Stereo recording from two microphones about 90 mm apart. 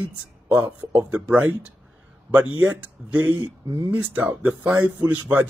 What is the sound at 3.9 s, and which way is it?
Speech, 15° right (ahead or behind).